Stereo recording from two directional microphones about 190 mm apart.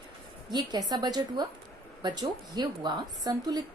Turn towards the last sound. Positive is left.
turn(degrees=-20)  # may be behind; listen again after turning